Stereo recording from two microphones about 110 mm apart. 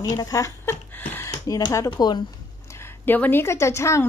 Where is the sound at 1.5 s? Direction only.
30° left (ahead or behind).